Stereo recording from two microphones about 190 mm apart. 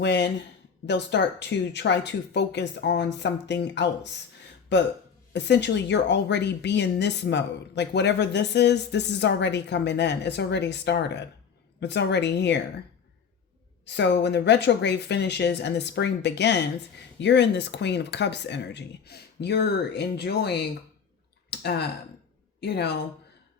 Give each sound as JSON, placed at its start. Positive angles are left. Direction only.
{"t": 0.0, "sound": "a woman's voice", "side_deg": 65}
{"t": 13.8, "sound": "a woman's voice", "side_deg": 65}
{"t": 21.5, "sound": "clicking", "side_deg": 60}
{"t": 22.6, "sound": "a woman's voice", "side_deg": 60}